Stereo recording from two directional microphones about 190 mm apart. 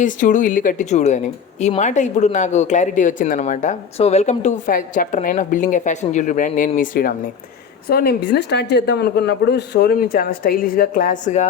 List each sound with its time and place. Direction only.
0.0 s speech: 40° left (ahead or behind)